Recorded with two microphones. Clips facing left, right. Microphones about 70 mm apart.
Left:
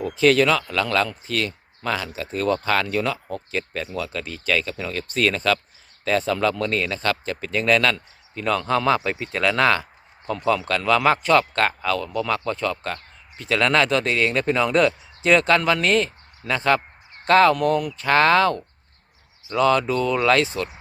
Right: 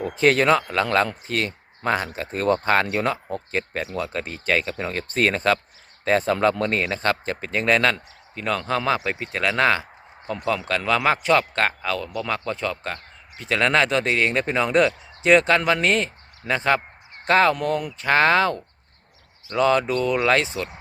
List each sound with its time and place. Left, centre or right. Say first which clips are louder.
0.1 s speech: even; right
8.4 s a man's voice: left 3 dB; centre